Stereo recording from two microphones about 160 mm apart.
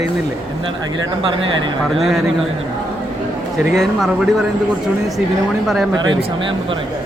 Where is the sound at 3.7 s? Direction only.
Centre (ahead or behind).